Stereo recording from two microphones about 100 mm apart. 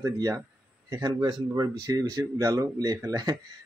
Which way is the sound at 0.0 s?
35° right (ahead or behind).